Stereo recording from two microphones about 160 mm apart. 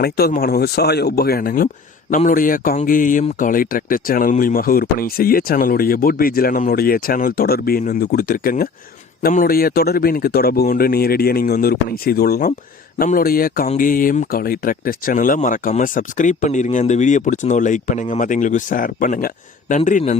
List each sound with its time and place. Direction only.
0.0 s speech: 70° left (ahead or behind); by 20.1 s 50° left (ahead or behind)